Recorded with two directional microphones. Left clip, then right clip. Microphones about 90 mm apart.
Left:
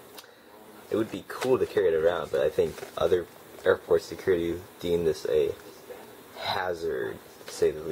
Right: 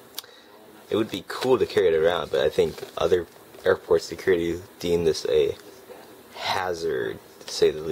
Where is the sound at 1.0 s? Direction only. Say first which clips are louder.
Right 4 dB; 60° right (ahead or behind).